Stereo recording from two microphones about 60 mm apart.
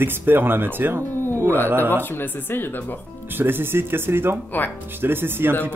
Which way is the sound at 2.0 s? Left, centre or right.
Left.